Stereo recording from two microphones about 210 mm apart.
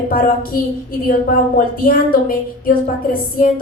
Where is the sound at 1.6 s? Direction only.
45° left (ahead or behind).